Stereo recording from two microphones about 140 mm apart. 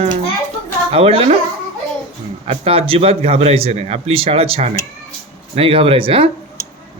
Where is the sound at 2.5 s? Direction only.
40° right (ahead or behind).